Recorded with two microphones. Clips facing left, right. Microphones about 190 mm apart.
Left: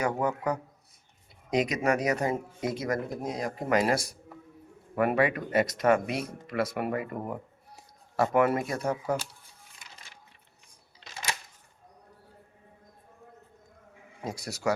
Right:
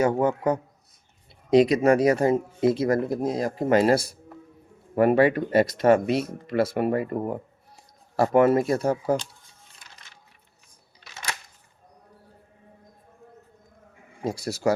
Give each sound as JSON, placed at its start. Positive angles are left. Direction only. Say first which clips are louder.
{"t": 0.0, "sound": "speech", "louder": "right 7 dB", "side_deg": -25}
{"t": 14.3, "sound": "speech", "louder": "right 7 dB", "side_deg": -30}